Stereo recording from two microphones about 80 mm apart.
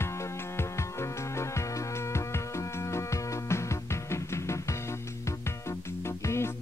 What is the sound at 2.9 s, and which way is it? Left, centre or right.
Music, left.